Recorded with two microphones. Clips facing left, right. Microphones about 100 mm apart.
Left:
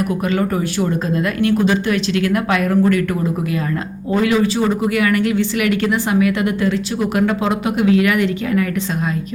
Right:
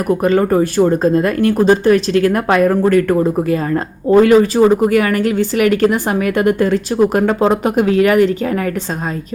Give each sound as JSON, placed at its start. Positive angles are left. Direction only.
{"t": 0.1, "sound": "speech", "side_deg": -40}